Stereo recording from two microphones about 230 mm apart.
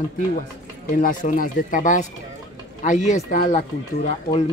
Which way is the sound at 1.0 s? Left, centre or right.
Left.